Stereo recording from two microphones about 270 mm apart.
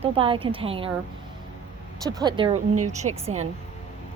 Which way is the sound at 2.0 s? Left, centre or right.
Centre.